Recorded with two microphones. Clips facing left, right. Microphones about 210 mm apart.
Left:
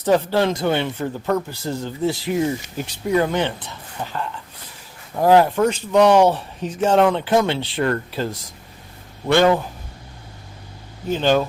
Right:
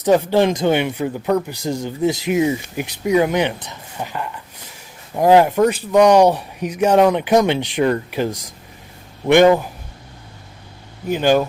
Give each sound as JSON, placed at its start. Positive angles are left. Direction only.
{"t": 0.0, "sound": "speech", "side_deg": -15}
{"t": 11.1, "sound": "speech", "side_deg": -10}